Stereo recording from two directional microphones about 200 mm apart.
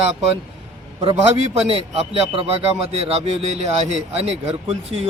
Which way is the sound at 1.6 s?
30° right (ahead or behind).